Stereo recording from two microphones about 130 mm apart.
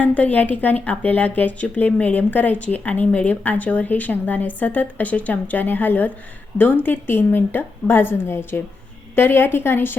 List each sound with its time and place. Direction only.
0.0 s a woman's voice: 10° left (ahead or behind)